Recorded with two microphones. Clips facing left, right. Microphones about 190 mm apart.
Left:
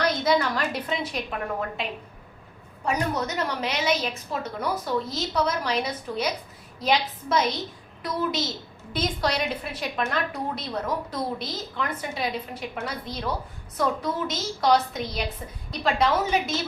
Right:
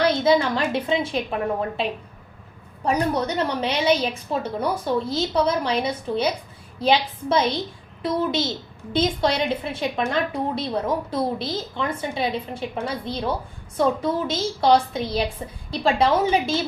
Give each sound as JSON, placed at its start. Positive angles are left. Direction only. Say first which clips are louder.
{"t": 0.0, "sound": "a woman's voice", "louder": "right 4 dB", "side_deg": -25}